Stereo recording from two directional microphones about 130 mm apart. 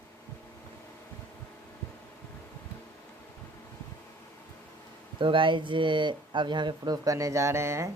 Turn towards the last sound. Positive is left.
turn(degrees=-20)  # may be behind; listen again after turning